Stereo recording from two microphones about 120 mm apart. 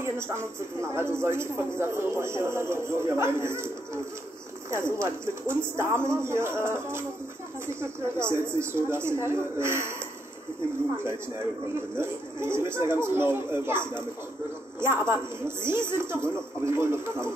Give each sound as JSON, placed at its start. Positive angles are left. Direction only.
{"t": 0.0, "sound": "a man's voice", "side_deg": -20}
{"t": 12.0, "sound": "a man's voice", "side_deg": -20}